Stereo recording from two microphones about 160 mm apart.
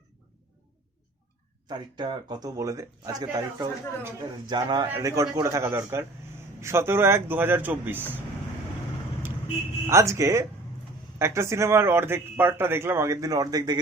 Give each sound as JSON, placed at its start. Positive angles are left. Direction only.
{"t": 1.6, "sound": "a man's voice", "side_deg": -30}
{"t": 9.8, "sound": "speech", "side_deg": -20}